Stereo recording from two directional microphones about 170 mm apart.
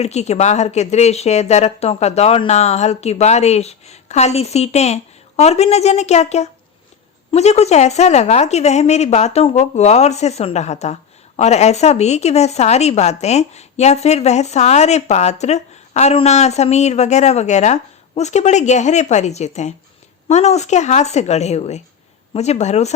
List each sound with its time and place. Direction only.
0.0 s a woman's voice: 40° left (ahead or behind)